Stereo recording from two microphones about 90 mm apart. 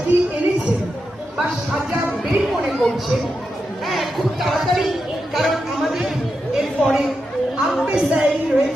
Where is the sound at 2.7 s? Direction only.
5° left (ahead or behind).